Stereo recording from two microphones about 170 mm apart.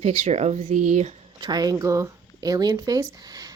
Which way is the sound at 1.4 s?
25° right (ahead or behind).